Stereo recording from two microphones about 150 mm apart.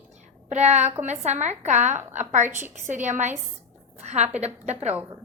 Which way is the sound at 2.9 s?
55° right (ahead or behind).